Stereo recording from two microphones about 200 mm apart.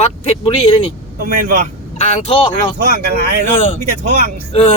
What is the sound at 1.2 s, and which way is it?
Speech, 45° right (ahead or behind).